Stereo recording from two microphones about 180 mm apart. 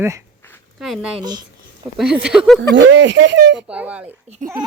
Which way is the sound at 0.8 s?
Centre (ahead or behind).